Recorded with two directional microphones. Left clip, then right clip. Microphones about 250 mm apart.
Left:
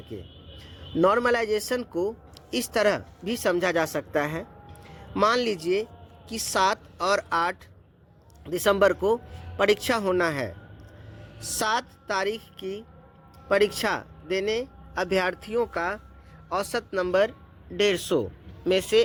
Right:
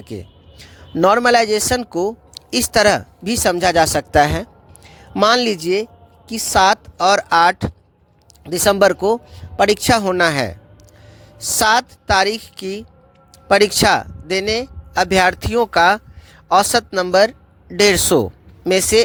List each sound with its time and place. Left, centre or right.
0.1 s speech: right